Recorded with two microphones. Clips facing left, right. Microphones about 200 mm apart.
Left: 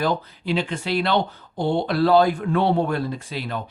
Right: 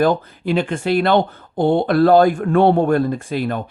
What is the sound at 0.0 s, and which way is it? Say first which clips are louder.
Speech: right 7 dB; 50° right (ahead or behind).